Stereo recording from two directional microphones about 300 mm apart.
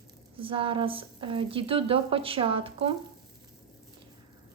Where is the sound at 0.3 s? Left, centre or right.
Centre.